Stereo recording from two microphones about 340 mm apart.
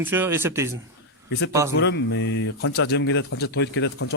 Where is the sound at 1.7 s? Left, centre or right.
Left.